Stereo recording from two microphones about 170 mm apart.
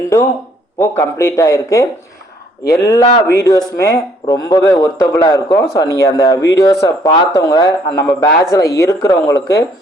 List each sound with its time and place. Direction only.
0.8 s speech: 15° left (ahead or behind)